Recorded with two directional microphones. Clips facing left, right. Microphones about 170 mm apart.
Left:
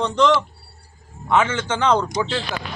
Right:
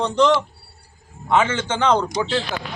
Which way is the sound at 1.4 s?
30° right (ahead or behind).